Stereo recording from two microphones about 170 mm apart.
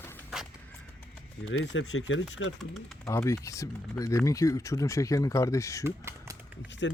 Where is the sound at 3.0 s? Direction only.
20° left (ahead or behind).